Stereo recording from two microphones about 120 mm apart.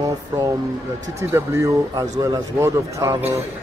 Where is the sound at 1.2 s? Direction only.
25° right (ahead or behind).